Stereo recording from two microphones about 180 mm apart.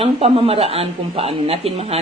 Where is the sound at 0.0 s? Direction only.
35° right (ahead or behind).